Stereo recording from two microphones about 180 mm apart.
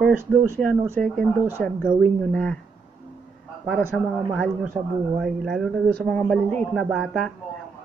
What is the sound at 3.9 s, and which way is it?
Speech, centre (ahead or behind).